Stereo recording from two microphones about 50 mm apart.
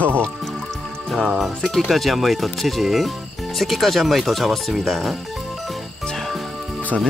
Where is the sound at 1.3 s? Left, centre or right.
Centre.